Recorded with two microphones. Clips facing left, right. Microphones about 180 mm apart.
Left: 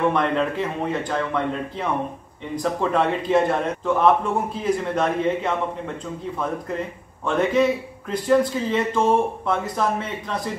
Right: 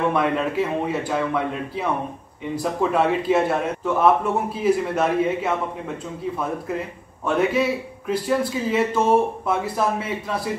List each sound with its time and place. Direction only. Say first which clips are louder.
0.1 s a man's voice: even; 5° right (ahead or behind)
7.2 s a man's voice: left 1 dB; 5° right (ahead or behind)